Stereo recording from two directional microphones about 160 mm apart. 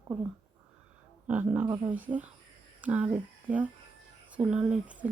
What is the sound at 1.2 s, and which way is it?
Speech, 10° right (ahead or behind).